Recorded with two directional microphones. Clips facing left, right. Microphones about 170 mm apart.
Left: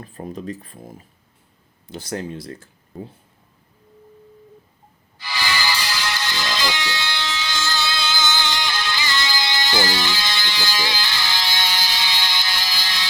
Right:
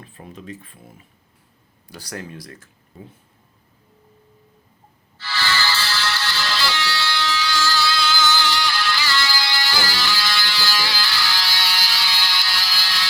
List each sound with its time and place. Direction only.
0.0 s speech: 40° left (ahead or behind)
1.9 s speech: 25° left (ahead or behind)
5.1 s music: 15° left (ahead or behind)